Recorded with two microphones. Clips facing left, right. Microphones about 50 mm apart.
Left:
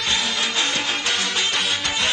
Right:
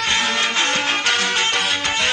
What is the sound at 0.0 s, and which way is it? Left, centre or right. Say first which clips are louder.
Music: right 4 dB; right.